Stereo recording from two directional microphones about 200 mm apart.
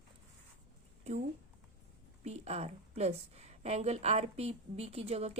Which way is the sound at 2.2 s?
35° right (ahead or behind).